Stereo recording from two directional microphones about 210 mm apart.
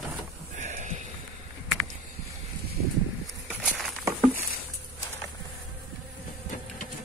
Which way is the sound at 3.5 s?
Centre (ahead or behind).